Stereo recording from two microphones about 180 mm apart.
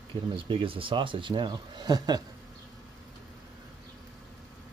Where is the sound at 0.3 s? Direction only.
30° right (ahead or behind).